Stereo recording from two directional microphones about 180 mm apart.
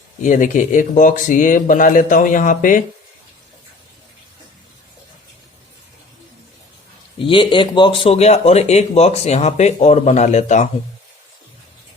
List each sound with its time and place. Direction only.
0.2 s speech: 45° left (ahead or behind)
7.2 s speech: 30° left (ahead or behind)